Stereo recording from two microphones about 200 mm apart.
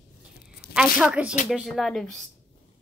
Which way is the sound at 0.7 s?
5° right (ahead or behind).